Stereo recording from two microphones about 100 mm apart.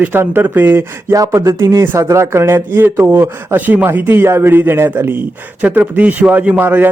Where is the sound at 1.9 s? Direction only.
25° right (ahead or behind).